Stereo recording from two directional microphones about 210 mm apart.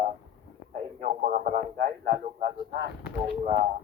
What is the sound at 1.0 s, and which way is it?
Speech, 35° right (ahead or behind).